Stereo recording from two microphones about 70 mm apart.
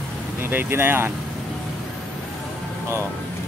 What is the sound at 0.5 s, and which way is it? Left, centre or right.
Speech, right.